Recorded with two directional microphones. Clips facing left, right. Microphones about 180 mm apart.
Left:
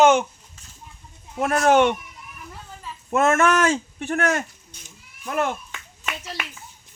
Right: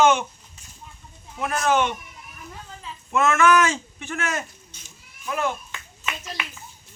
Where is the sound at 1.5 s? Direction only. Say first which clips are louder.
Left 5 dB; 65° left (ahead or behind).